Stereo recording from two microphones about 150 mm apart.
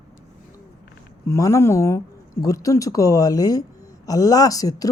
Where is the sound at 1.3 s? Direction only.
20° left (ahead or behind).